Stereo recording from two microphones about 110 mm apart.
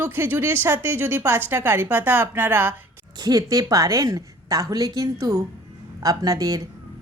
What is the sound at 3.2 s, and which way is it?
A woman's voice, 35° right (ahead or behind).